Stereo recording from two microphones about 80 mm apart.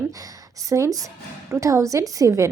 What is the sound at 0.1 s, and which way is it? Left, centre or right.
A woman's voice, right.